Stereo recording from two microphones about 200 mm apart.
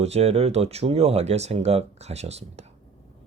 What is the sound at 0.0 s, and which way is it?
Speech, 30° right (ahead or behind).